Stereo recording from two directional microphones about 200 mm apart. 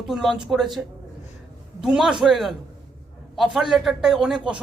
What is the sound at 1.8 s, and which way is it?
A man's voice, 5° right (ahead or behind).